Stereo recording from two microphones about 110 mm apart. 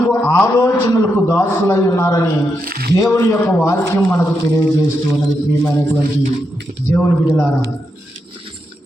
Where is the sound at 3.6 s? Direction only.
25° left (ahead or behind).